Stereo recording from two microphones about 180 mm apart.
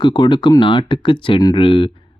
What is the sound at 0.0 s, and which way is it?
Speech, 25° left (ahead or behind).